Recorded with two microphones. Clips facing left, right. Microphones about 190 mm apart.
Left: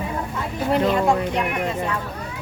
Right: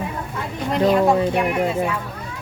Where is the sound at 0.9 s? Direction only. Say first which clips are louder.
Right 3 dB; 5° right (ahead or behind).